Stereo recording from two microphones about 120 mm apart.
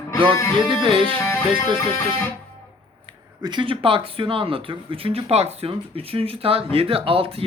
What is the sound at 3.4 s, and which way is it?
Speech, 40° right (ahead or behind).